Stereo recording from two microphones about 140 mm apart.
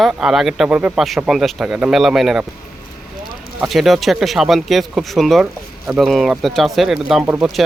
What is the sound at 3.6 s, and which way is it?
Speech, centre (ahead or behind).